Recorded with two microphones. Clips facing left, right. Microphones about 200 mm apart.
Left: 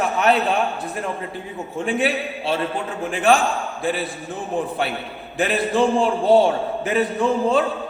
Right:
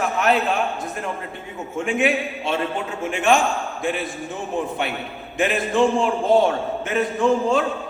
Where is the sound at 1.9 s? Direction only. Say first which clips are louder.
Right 1 dB; 35° left (ahead or behind).